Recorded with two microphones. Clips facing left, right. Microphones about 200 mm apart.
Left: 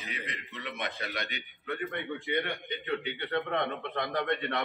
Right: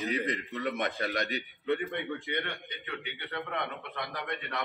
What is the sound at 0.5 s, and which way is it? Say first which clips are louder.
A man's voice: right 2 dB; 50° right (ahead or behind).